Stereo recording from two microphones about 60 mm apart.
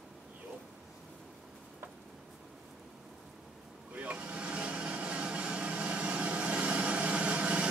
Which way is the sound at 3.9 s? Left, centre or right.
Right.